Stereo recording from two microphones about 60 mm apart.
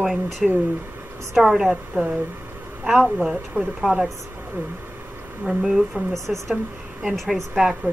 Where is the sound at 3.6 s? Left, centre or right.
Right.